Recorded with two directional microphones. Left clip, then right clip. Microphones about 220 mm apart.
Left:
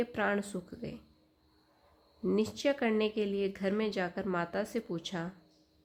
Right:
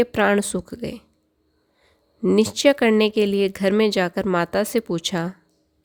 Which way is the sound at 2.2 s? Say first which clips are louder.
Right 14 dB; 50° right (ahead or behind).